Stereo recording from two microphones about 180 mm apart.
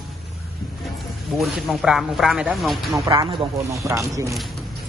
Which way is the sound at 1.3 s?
Centre (ahead or behind).